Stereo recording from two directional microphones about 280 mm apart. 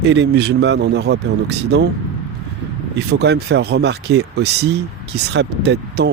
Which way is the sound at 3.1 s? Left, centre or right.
Right.